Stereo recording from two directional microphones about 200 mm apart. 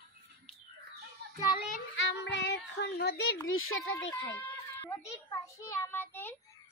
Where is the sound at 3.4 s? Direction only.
90° left.